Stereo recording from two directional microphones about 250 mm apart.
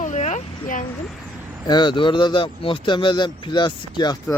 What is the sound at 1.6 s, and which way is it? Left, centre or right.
Speech, centre.